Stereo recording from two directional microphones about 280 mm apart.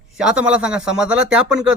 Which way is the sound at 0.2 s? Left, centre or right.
Centre.